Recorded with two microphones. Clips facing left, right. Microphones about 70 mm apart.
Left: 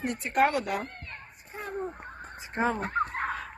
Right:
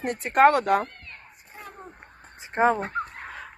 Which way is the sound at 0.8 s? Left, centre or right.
Left.